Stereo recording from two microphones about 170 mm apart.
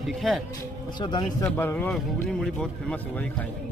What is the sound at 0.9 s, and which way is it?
Speech, 25° left (ahead or behind).